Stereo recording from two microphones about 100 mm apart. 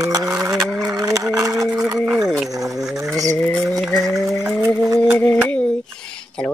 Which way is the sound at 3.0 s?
35° right (ahead or behind).